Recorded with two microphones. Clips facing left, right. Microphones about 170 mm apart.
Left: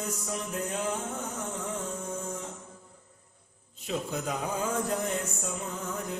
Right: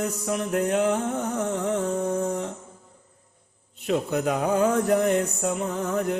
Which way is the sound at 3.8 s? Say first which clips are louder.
Right 8 dB; 65° right (ahead or behind).